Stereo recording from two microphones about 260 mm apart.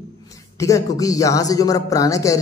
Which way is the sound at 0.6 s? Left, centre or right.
Centre.